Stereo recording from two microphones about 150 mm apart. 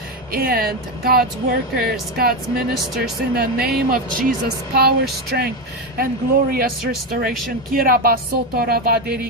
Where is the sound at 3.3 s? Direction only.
90° right.